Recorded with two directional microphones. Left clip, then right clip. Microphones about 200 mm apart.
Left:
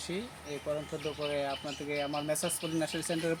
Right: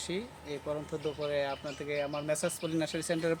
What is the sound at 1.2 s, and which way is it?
Speech, 20° right (ahead or behind).